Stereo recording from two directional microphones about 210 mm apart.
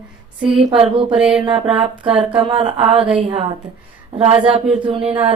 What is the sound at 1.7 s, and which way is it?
Bell, 5° right (ahead or behind).